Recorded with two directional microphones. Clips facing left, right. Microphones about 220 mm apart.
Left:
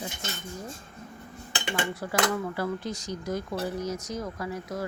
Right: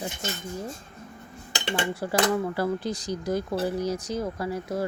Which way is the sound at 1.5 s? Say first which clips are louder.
Right 2 dB; 35° right (ahead or behind).